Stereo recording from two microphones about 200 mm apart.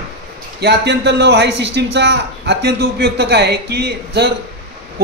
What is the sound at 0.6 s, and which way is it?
A man's voice, 60° right (ahead or behind).